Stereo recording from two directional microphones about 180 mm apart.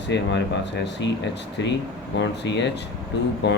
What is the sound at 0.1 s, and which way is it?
Speech, 75° left (ahead or behind).